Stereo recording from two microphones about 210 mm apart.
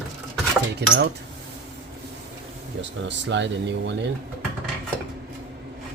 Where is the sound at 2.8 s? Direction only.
60° right (ahead or behind).